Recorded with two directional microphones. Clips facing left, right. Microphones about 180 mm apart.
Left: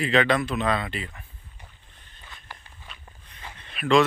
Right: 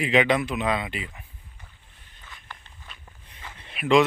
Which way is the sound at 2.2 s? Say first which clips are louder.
Even; 15° left (ahead or behind).